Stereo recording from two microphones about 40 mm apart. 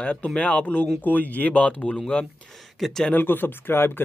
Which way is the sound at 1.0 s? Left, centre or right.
Left.